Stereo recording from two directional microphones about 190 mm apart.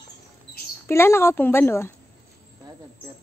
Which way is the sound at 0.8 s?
15° left (ahead or behind).